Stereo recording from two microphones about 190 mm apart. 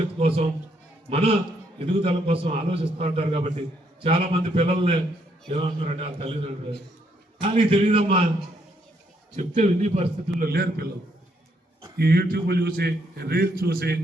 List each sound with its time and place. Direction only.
0.2 s a man's voice: 30° right (ahead or behind)
7.4 s a man's voice: 30° right (ahead or behind)
9.3 s a man's voice: 40° right (ahead or behind)
10.4 s a man's voice: 55° right (ahead or behind)
11.9 s a man's voice: 55° right (ahead or behind)